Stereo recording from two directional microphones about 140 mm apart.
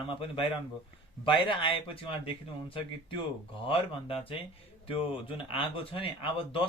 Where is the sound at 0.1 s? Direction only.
35° left (ahead or behind).